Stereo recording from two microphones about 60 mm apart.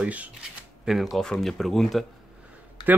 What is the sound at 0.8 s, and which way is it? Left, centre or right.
Speech, centre.